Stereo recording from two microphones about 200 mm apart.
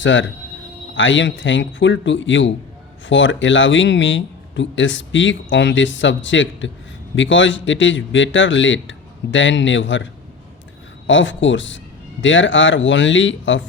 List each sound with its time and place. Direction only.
0.0 s speech: 70° left (ahead or behind)